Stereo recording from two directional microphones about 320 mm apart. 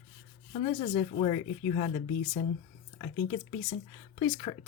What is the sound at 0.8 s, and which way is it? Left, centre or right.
Speech, left.